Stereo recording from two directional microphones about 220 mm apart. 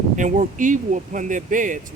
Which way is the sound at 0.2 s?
35° right (ahead or behind).